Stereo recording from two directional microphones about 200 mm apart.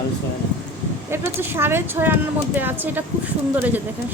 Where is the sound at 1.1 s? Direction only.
10° right (ahead or behind).